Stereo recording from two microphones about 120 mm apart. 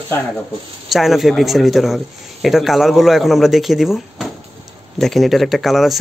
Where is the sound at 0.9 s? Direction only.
Centre (ahead or behind).